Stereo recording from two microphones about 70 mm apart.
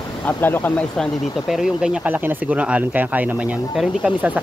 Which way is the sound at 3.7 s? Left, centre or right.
Centre.